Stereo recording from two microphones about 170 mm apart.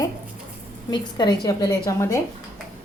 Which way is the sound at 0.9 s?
25° left (ahead or behind).